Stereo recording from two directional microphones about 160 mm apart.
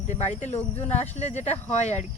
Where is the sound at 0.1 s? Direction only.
45° left (ahead or behind).